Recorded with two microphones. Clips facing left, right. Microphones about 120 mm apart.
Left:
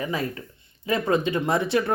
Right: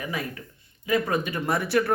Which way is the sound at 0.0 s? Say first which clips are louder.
Left 4 dB; 30° left (ahead or behind).